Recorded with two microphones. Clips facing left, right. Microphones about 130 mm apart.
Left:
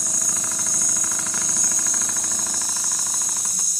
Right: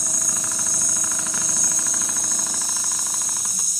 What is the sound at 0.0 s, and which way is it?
Engine, centre (ahead or behind).